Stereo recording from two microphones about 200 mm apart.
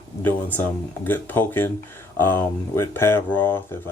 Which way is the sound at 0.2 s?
10° left (ahead or behind).